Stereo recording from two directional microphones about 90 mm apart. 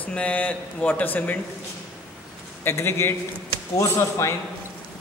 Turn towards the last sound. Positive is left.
turn(degrees=35)  # may be behind; listen again after turning